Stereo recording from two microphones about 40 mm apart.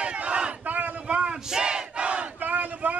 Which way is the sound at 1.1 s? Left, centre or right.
Right.